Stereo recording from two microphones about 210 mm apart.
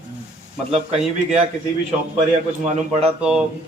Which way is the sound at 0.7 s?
30° right (ahead or behind).